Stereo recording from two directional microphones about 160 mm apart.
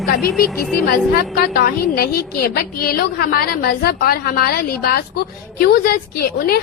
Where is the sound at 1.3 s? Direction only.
75° left (ahead or behind).